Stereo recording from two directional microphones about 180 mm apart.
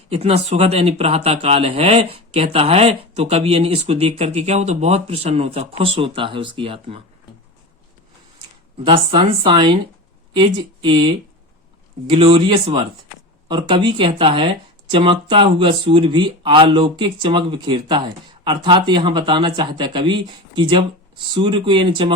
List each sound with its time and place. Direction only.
0.1 s speech: 35° right (ahead or behind)
8.4 s a sound: 25° right (ahead or behind)
9.0 s speech: 30° right (ahead or behind)